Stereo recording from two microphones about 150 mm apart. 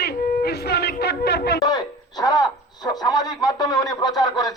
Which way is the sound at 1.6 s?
25° left (ahead or behind).